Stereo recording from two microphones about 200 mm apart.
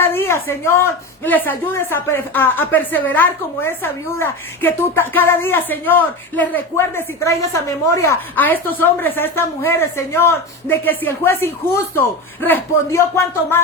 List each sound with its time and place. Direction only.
0.0 s speech: 10° left (ahead or behind)